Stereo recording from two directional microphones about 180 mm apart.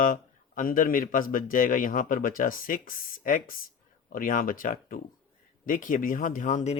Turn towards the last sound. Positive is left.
turn(degrees=40)  # may be behind; listen again after turning